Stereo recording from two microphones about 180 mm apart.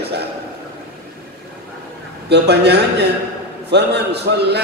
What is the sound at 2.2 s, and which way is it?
A man's voice, 65° right (ahead or behind).